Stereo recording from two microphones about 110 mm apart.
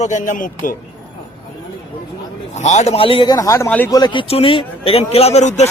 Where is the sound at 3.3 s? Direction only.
30° left (ahead or behind).